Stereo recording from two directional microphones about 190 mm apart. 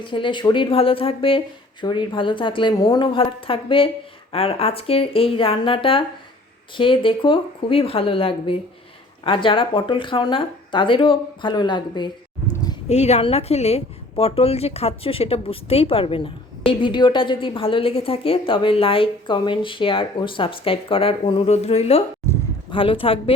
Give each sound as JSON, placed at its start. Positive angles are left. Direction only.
{"t": 0.0, "sound": "a woman's voice", "side_deg": 25}
{"t": 12.9, "sound": "a woman's voice", "side_deg": 35}